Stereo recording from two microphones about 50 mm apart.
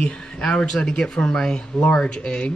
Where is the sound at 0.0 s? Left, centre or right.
Centre.